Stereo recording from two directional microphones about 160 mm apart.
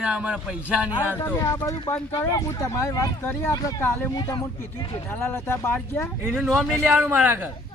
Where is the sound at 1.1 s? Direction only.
15° left (ahead or behind).